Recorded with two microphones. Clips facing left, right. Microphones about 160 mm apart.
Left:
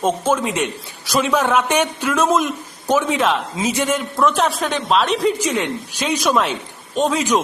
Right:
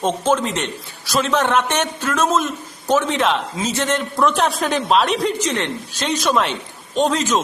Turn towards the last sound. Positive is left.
turn(degrees=10)  # may be behind; listen again after turning